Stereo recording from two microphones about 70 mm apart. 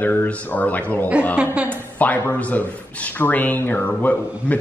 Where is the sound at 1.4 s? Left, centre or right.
Centre.